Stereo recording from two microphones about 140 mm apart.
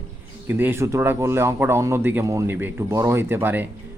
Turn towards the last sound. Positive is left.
turn(degrees=-15)  # may be behind; listen again after turning